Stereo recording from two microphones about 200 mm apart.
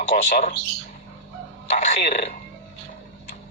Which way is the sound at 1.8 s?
40° left (ahead or behind).